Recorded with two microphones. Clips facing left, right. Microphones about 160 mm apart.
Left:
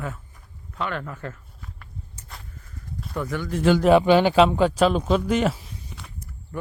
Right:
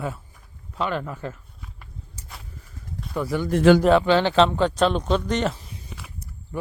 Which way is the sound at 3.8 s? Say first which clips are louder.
Left 2 dB; 10° left (ahead or behind).